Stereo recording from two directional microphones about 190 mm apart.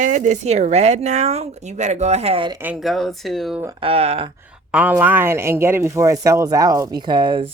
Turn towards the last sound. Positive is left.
turn(degrees=-25)  # may be behind; listen again after turning